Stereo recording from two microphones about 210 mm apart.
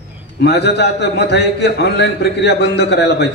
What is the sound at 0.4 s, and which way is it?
A man's voice, 55° left (ahead or behind).